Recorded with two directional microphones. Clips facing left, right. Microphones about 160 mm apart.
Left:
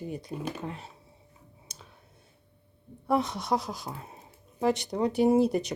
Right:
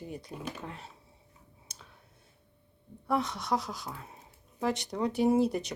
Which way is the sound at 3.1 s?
20° left (ahead or behind).